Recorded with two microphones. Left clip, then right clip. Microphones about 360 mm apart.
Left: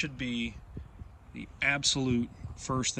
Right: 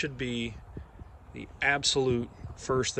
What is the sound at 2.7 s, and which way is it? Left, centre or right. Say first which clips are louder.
Speech: right 5 dB; centre.